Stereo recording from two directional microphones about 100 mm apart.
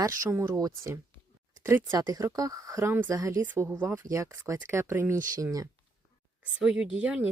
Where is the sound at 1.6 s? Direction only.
25° right (ahead or behind).